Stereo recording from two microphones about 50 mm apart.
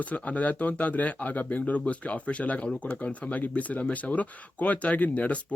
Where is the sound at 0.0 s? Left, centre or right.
Left.